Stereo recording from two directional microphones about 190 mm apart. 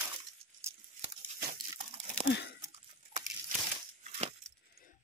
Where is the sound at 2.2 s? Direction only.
60° left (ahead or behind).